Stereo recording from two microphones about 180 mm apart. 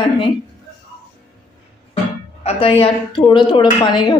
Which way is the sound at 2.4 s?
30° left (ahead or behind).